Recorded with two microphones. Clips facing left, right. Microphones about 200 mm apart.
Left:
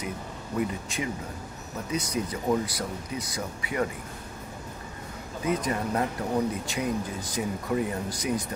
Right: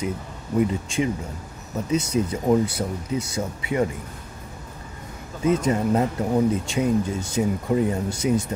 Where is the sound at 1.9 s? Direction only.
25° right (ahead or behind).